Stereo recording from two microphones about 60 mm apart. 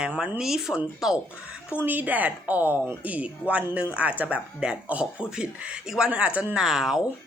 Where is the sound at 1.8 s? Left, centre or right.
Right; by 6.1 s centre.